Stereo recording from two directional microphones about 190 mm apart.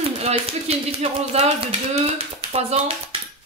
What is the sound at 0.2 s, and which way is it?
Speech, 35° right (ahead or behind).